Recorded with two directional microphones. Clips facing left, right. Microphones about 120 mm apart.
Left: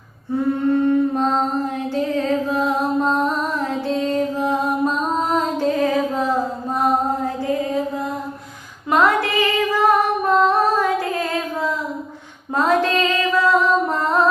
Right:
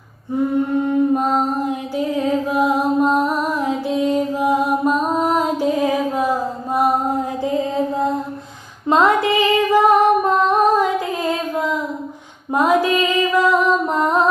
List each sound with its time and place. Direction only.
0.9 s music: 10° right (ahead or behind)
8.9 s music: 20° right (ahead or behind)